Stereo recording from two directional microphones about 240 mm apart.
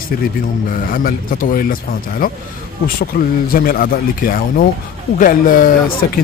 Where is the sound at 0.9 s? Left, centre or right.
Left.